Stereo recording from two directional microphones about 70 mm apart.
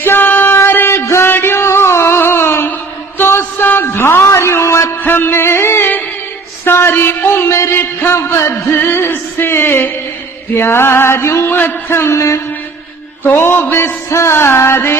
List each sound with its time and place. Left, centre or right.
0.0 s music: left
3.2 s a sound: left
4.9 s music: left
6.7 s a sound: left
10.5 s music: left
13.2 s music: left